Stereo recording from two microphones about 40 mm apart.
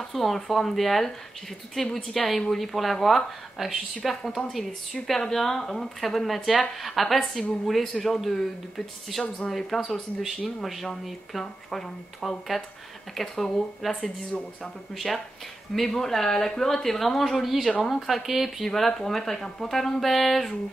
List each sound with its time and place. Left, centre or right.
0.0 s speech: centre
18.7 s speech: centre